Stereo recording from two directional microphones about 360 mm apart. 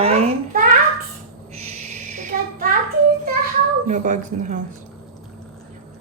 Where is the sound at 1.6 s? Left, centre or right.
Centre.